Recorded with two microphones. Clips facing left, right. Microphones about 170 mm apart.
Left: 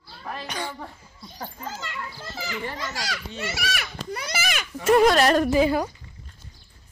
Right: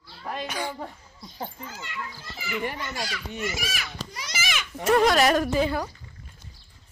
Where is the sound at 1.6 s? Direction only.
90° left.